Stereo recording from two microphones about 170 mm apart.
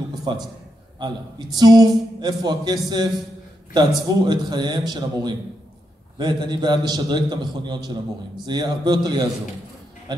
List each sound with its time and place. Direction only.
0.3 s a man's voice: 25° right (ahead or behind)